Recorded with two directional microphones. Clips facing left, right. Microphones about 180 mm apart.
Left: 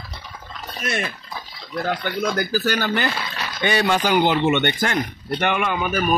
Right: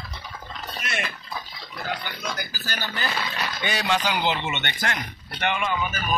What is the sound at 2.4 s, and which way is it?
Speech, 65° left (ahead or behind).